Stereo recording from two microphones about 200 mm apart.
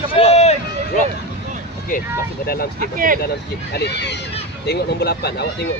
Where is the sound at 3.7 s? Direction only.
55° left (ahead or behind).